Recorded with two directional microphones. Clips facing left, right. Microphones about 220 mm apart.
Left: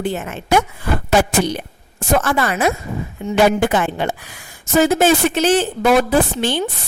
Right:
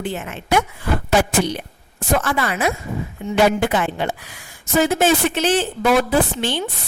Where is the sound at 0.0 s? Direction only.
40° left (ahead or behind).